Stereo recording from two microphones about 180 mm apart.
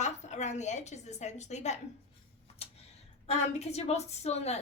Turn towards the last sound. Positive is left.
turn(degrees=35)  # may be behind; listen again after turning